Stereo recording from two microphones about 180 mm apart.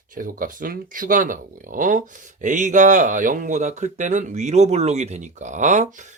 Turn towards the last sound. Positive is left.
turn(degrees=-40)  # may be behind; listen again after turning